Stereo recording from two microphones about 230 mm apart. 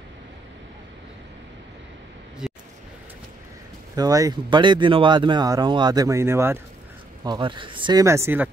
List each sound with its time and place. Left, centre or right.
3.9 s speech: centre